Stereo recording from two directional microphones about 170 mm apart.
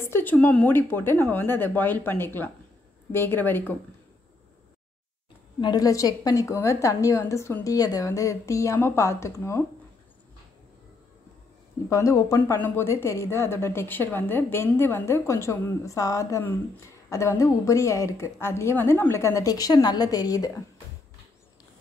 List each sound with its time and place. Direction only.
0.0 s speech: 10° left (ahead or behind)
5.6 s a woman's voice: 25° left (ahead or behind)
11.9 s speech: 20° left (ahead or behind)